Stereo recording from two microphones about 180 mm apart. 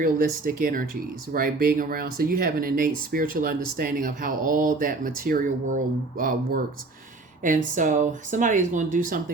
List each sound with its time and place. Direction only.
0.0 s speech: 50° right (ahead or behind)